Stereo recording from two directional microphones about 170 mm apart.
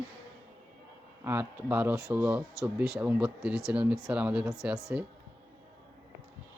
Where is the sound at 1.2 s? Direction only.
10° right (ahead or behind).